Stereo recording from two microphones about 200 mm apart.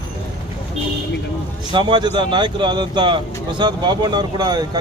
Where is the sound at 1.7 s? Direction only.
20° right (ahead or behind).